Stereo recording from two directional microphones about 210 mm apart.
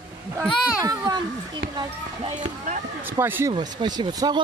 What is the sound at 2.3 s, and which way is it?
Speech, 35° right (ahead or behind).